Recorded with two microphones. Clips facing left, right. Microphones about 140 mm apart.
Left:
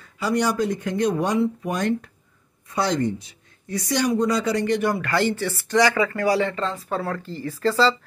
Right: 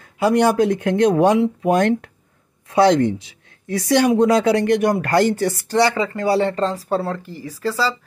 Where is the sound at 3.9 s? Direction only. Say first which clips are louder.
Right 7 dB; 60° right (ahead or behind).